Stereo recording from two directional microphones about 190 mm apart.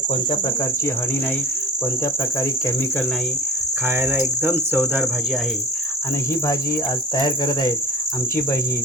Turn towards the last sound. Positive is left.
turn(degrees=20)  # may be behind; listen again after turning